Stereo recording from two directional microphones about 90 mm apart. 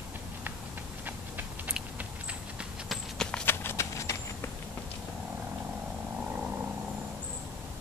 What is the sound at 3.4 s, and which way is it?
Clip-clop, 25° left (ahead or behind).